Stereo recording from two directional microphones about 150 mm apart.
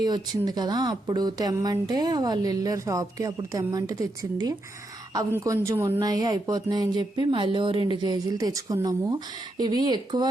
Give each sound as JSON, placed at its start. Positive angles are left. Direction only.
{"t": 0.0, "sound": "speech", "side_deg": -25}